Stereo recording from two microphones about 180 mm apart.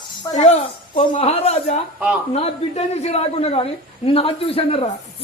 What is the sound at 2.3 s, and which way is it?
A woman's voice, 35° left (ahead or behind).